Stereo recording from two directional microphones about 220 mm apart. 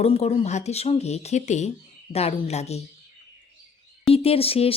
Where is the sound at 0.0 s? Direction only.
30° left (ahead or behind).